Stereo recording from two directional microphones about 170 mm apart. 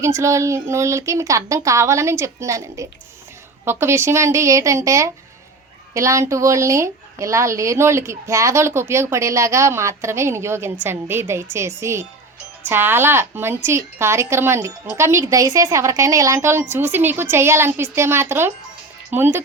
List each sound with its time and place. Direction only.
0.0 s a woman's voice: 15° right (ahead or behind)